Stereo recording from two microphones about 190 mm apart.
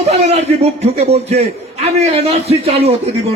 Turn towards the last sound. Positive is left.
turn(degrees=-30)  # may be behind; listen again after turning